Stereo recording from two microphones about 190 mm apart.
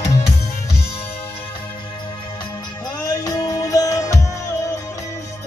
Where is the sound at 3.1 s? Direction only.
20° left (ahead or behind).